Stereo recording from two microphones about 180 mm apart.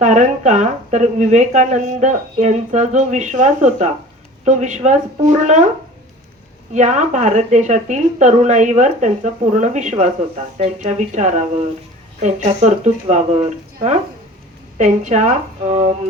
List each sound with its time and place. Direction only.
0.0 s speech: 40° right (ahead or behind)
6.7 s speech: 40° right (ahead or behind)
14.8 s speech: 40° right (ahead or behind)